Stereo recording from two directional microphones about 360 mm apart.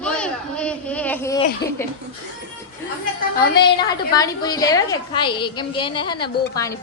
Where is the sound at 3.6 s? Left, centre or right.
Centre.